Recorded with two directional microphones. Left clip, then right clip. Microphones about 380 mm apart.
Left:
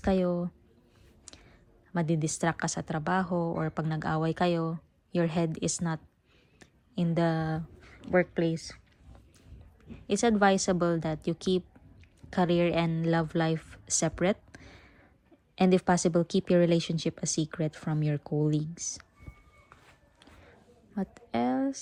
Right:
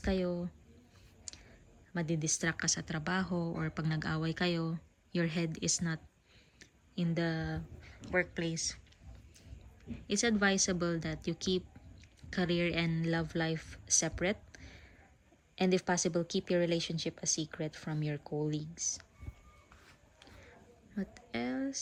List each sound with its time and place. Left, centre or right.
0.0 s a woman's voice: centre
1.3 s clicking: centre
1.9 s a woman's voice: centre
6.6 s a sound: centre
8.2 s a woman's voice: centre
9.9 s a woman's voice: centre
18.2 s speech: left
18.5 s a woman's voice: centre
20.9 s speech: centre